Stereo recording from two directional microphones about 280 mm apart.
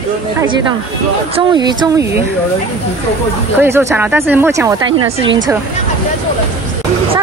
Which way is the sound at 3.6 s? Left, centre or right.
Centre.